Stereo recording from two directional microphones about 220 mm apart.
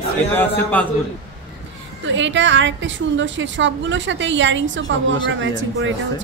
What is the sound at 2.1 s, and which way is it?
A woman's voice, 55° right (ahead or behind).